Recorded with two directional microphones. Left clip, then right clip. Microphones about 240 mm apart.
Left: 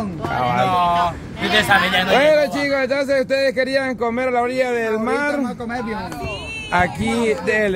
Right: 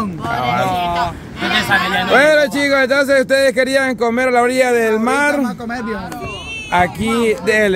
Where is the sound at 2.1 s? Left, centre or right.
Right.